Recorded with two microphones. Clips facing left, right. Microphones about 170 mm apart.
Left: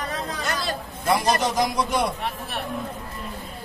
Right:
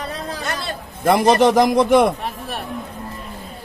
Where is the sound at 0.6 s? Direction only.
60° right (ahead or behind).